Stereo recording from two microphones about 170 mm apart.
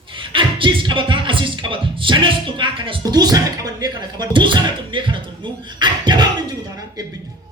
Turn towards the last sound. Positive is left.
turn(degrees=-25)  # may be behind; listen again after turning